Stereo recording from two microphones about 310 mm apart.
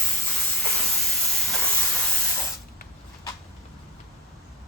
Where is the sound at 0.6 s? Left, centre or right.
Centre.